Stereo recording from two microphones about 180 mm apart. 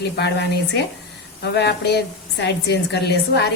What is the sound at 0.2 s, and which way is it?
A woman's voice, 75° left (ahead or behind).